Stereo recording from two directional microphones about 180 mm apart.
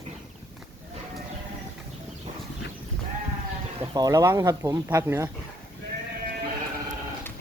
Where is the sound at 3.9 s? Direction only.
20° right (ahead or behind).